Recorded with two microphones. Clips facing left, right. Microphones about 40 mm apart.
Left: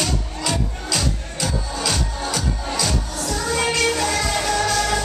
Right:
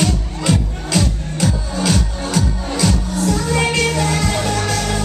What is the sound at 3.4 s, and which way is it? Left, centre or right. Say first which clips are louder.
Music: left 2 dB; centre.